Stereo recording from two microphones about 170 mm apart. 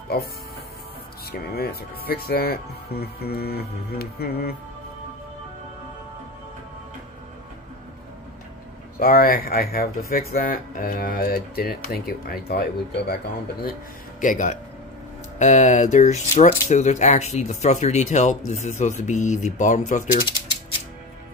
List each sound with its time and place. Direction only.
1.3 s speech: 65° left (ahead or behind)
9.0 s speech: 60° left (ahead or behind)
14.2 s speech: 50° left (ahead or behind)